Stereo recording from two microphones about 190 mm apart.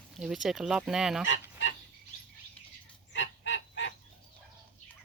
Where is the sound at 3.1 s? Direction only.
75° left (ahead or behind).